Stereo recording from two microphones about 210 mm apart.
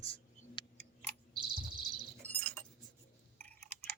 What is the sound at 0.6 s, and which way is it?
Tick, 20° left (ahead or behind).